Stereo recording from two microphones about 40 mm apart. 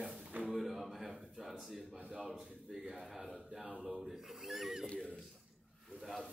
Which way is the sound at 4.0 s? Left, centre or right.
Centre.